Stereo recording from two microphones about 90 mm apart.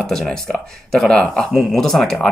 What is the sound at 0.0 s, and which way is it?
Speech, 5° left (ahead or behind).